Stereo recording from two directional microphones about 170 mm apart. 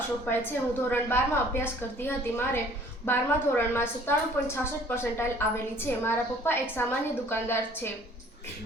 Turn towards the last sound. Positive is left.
turn(degrees=15)  # may be behind; listen again after turning